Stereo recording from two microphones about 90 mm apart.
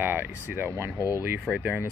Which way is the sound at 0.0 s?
20° right (ahead or behind).